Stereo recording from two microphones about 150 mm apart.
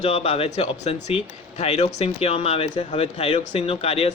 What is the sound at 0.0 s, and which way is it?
Speech, 40° left (ahead or behind).